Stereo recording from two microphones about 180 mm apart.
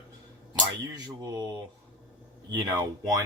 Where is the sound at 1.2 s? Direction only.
25° right (ahead or behind).